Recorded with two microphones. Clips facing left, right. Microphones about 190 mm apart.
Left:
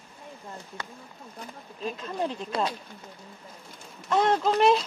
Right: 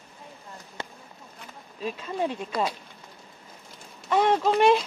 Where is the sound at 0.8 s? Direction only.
25° right (ahead or behind).